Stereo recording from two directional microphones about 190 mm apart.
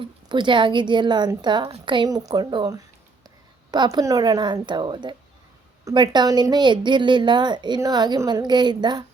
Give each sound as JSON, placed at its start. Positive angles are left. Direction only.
{"t": 0.0, "sound": "speech", "side_deg": -25}